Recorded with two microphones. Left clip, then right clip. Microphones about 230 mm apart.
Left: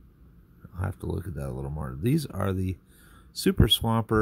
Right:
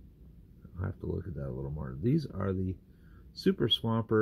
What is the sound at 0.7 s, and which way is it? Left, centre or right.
Speech, left.